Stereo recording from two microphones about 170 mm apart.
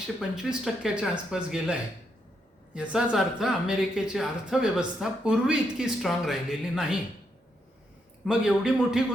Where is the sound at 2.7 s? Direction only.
5° right (ahead or behind).